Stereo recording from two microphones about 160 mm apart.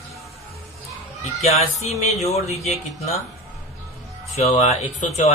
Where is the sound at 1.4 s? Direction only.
40° left (ahead or behind).